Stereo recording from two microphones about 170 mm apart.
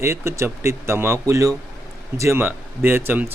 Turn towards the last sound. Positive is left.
turn(degrees=-15)  # may be behind; listen again after turning